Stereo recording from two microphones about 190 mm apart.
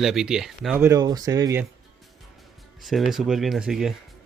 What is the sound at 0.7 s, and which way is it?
Speech, 15° right (ahead or behind).